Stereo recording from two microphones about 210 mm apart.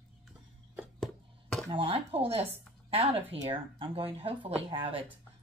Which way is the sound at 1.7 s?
25° right (ahead or behind).